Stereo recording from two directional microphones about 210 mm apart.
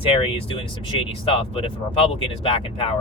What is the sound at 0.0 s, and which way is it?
Speech, 25° left (ahead or behind).